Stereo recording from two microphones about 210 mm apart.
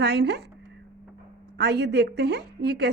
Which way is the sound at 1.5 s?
50° right (ahead or behind).